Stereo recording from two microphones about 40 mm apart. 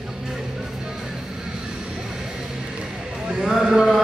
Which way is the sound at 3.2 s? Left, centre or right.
Centre.